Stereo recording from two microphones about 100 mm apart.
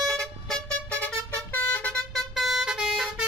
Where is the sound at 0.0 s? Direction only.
5° left (ahead or behind).